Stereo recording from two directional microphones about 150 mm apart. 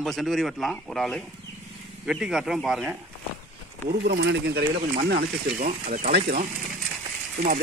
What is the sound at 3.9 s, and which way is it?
Speech, 90° right.